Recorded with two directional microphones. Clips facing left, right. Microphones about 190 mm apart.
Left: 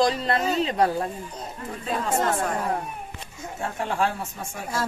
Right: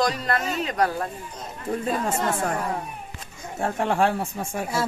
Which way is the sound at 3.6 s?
55° right (ahead or behind).